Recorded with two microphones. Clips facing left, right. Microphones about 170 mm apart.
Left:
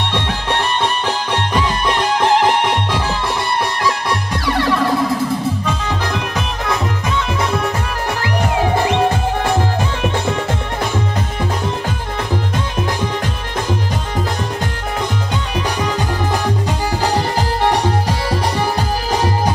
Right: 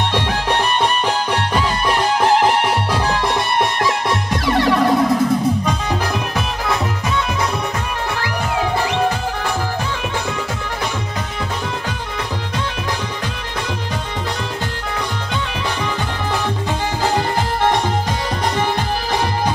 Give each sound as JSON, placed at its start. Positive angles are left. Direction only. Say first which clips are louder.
{"t": 4.5, "sound": "music", "louder": "right 2 dB", "side_deg": -25}